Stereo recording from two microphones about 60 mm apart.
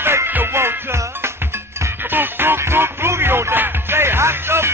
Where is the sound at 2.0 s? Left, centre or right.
Right.